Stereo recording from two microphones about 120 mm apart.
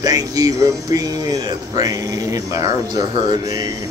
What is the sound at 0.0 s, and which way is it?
Music, 30° right (ahead or behind).